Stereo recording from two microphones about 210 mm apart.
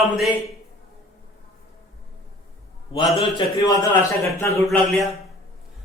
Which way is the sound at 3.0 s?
20° left (ahead or behind).